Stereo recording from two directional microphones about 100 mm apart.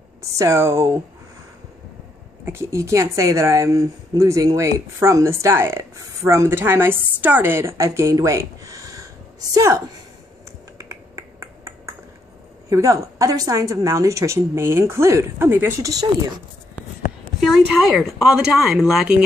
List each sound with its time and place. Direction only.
0.2 s speech: 30° right (ahead or behind)
2.4 s a woman's voice: 25° right (ahead or behind)
10.8 s finger snapping: 30° right (ahead or behind)
12.6 s a woman's voice: 30° right (ahead or behind)
15.8 s a woman's voice: 40° right (ahead or behind)
17.5 s speech: centre (ahead or behind)